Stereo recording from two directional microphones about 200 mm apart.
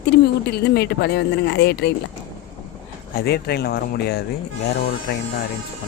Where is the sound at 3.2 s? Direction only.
50° left (ahead or behind).